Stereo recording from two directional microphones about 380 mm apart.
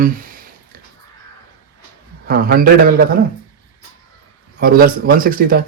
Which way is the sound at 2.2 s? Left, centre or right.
Right.